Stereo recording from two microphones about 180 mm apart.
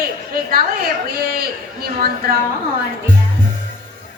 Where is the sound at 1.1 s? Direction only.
60° right (ahead or behind).